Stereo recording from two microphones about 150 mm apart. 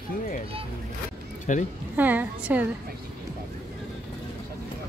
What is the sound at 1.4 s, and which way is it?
Speech, 55° left (ahead or behind).